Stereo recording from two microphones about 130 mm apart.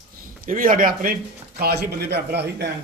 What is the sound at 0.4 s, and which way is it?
Speech, 90° right.